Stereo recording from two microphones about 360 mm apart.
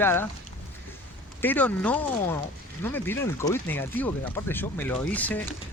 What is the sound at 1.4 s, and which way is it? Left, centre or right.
Speech, centre.